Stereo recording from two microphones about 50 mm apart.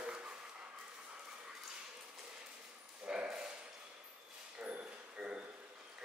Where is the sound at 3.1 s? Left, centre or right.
Centre.